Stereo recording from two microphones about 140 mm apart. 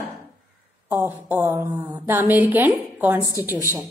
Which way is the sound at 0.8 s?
15° right (ahead or behind).